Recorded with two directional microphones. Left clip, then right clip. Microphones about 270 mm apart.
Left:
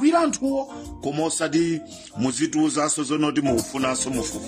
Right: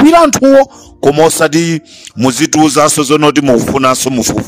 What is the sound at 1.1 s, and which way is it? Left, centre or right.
Speech, right.